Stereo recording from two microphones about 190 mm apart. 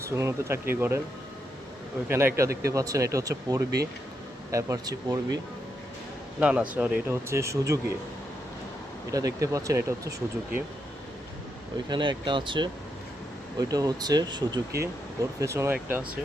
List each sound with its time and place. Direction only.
0.0 s speech: 15° right (ahead or behind)
2.0 s speech: 10° right (ahead or behind)
6.4 s speech: 5° right (ahead or behind)
9.1 s speech: 15° right (ahead or behind)
11.9 s speech: 25° right (ahead or behind)